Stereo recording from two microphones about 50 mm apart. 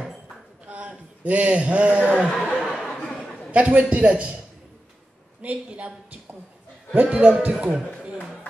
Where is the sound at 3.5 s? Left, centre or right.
Right.